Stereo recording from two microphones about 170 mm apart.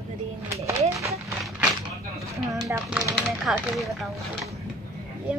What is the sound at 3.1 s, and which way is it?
Speech, centre (ahead or behind).